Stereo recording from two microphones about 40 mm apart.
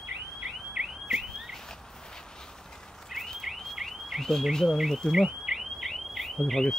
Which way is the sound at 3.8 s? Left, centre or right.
Centre.